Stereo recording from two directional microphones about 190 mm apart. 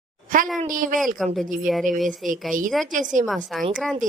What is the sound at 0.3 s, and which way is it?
Speech, 45° right (ahead or behind).